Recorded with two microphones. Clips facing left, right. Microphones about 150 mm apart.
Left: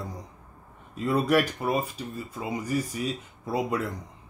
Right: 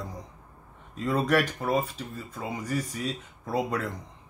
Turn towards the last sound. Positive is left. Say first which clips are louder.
# left 1 dB
turn(degrees=10)  # may be behind; listen again after turning